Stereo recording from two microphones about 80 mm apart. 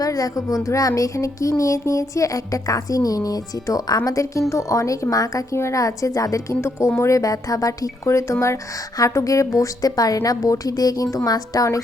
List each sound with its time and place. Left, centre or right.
0.0 s speech: left